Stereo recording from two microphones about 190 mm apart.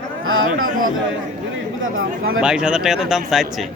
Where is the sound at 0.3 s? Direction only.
90° right.